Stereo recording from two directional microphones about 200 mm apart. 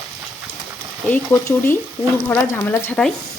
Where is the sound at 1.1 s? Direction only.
10° left (ahead or behind).